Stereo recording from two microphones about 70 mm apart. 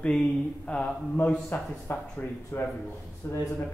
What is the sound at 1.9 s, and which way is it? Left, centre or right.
Speech, left.